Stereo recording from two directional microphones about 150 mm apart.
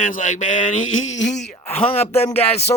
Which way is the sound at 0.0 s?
60° left (ahead or behind).